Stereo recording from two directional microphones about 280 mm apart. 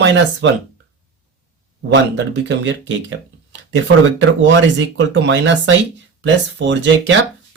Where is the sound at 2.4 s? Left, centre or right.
Right.